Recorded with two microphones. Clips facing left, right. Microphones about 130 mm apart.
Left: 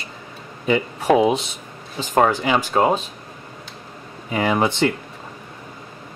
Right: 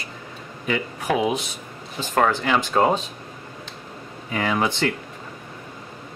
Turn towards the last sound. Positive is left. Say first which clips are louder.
# left 3 dB
turn(degrees=20)  # may be behind; listen again after turning